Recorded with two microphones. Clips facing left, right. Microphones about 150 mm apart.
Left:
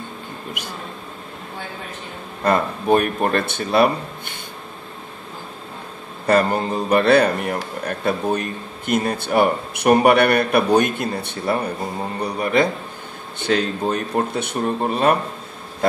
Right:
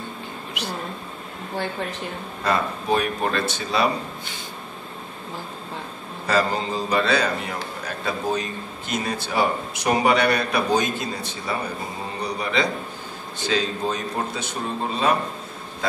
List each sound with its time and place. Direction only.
0.6 s vehicle: 50° left (ahead or behind)
2.4 s speech: 50° left (ahead or behind)
6.2 s a man's voice: 55° left (ahead or behind)